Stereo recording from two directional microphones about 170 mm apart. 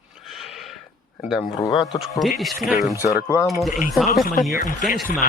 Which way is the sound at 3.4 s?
Centre (ahead or behind).